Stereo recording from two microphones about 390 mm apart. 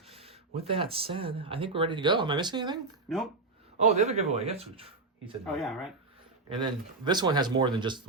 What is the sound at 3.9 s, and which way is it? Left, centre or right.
Speech, centre.